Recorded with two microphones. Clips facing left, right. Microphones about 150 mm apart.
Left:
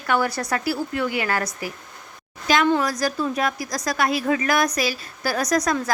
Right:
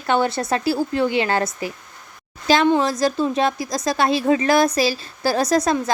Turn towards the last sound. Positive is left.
turn(degrees=-25)  # may be behind; listen again after turning